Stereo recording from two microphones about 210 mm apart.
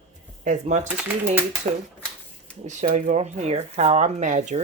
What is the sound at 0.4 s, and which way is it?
Speech, 35° right (ahead or behind).